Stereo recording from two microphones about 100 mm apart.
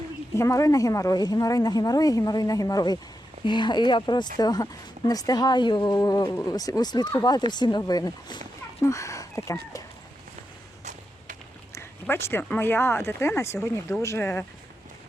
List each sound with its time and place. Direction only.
0.3 s a woman's voice: 30° left (ahead or behind)
3.4 s speech: 50° left (ahead or behind)
6.2 s speech: 25° left (ahead or behind)
6.5 s a woman's voice: 40° left (ahead or behind)
8.8 s speech: 30° left (ahead or behind)
11.7 s speech: 25° left (ahead or behind)